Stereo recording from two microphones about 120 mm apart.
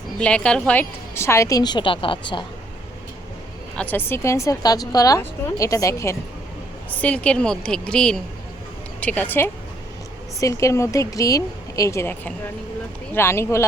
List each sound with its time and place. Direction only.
0.2 s a woman's voice: 10° left (ahead or behind); by 2.5 s 40° left (ahead or behind)
3.8 s a woman's voice: 15° left (ahead or behind)
6.9 s a woman's voice: 10° left (ahead or behind)